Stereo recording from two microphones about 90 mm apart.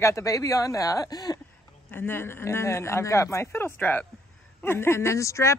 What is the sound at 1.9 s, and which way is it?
Speech, 25° left (ahead or behind).